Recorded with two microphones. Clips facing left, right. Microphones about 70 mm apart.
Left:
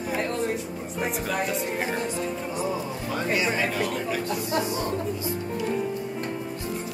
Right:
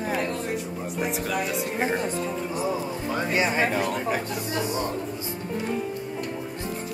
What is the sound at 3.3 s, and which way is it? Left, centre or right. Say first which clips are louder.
Speech: right 2 dB; right.